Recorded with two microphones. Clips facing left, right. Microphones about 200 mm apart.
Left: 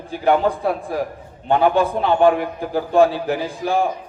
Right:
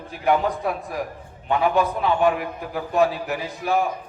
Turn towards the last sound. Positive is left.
turn(degrees=30)  # may be behind; listen again after turning